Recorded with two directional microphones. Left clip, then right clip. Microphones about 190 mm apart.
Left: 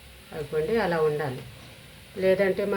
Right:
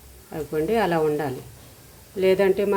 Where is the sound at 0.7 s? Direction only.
50° right (ahead or behind).